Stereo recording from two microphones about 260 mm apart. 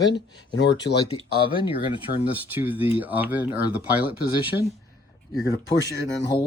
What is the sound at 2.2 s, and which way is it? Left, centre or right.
Speech, centre.